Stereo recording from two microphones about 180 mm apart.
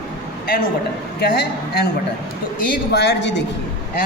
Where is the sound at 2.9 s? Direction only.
70° left (ahead or behind).